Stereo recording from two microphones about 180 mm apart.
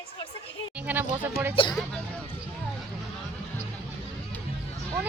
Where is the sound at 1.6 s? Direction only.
30° left (ahead or behind).